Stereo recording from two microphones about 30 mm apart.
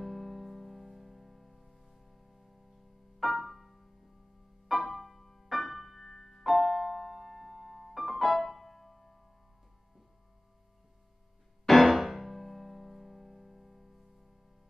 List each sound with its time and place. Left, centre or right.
0.0 s music: centre
6.0 s music: centre
6.4 s piano: centre
11.6 s music: centre